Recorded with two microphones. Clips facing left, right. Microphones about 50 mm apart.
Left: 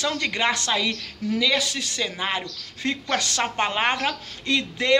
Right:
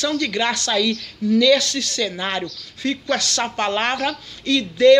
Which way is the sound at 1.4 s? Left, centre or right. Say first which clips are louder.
Right 7 dB; centre.